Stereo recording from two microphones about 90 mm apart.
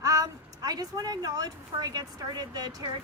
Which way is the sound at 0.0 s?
40° right (ahead or behind).